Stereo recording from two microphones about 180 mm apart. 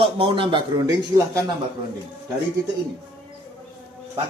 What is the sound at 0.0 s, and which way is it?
A man's voice, 30° right (ahead or behind).